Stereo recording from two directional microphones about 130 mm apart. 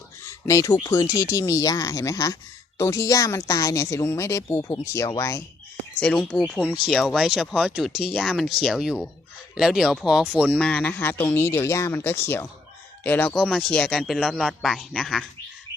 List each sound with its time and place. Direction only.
0.3 s speech: 25° left (ahead or behind)
6.0 s a man's voice: 5° left (ahead or behind)
10.6 s speech: 10° left (ahead or behind)
13.3 s a man's voice: centre (ahead or behind)